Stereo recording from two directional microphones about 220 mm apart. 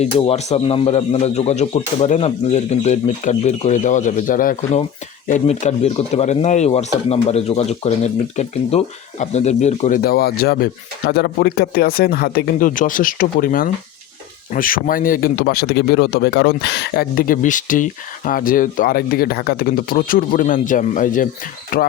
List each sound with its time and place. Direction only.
0.0 s speech: 30° left (ahead or behind)